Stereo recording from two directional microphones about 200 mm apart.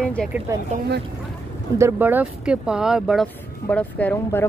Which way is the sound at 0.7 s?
55° right (ahead or behind).